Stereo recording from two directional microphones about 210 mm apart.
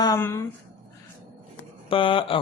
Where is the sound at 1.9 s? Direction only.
25° left (ahead or behind).